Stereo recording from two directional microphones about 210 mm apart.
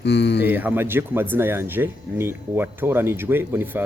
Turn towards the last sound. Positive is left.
turn(degrees=-10)  # may be behind; listen again after turning